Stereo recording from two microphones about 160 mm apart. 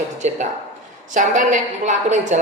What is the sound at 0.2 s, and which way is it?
A woman's voice, 50° right (ahead or behind).